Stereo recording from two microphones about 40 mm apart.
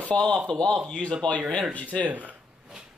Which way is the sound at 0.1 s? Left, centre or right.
Left.